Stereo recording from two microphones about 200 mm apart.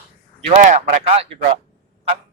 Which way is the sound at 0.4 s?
35° right (ahead or behind).